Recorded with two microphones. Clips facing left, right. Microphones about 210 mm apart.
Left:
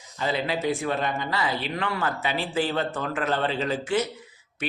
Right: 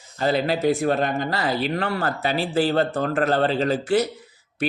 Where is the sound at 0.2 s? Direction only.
40° right (ahead or behind).